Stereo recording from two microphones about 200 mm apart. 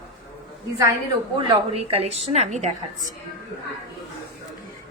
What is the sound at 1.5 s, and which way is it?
A woman's voice, 30° right (ahead or behind).